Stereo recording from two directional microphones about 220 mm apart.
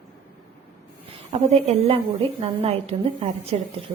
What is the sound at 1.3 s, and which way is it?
A woman's voice, 30° right (ahead or behind).